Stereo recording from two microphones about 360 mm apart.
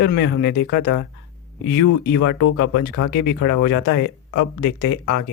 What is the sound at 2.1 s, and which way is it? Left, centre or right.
Speech, left.